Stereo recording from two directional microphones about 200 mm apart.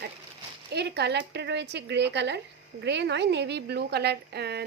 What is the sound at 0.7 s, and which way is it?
A woman's voice, 55° right (ahead or behind).